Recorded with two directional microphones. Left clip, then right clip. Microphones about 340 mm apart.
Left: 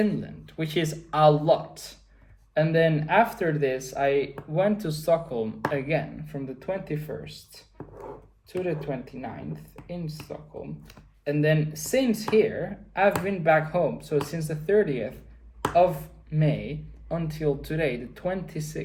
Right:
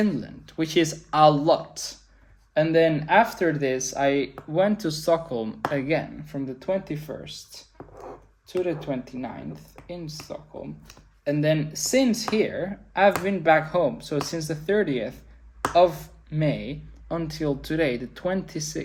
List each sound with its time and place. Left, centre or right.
0.4 s speech: right
8.8 s speech: right
10.8 s speech: right
16.3 s speech: right